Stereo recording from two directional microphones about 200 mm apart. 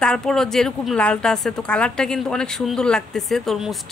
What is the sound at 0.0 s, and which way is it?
A woman's voice, 5° left (ahead or behind).